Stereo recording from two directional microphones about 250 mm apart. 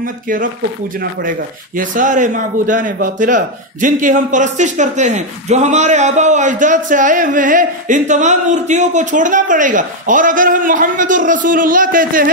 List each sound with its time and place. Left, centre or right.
0.0 s a man's voice: right
1.8 s a man's voice: right